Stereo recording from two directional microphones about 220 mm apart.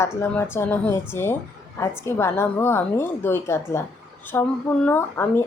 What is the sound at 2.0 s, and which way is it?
A woman's voice, 10° left (ahead or behind).